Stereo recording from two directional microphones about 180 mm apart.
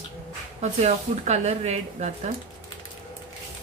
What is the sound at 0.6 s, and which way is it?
Speech, 40° right (ahead or behind).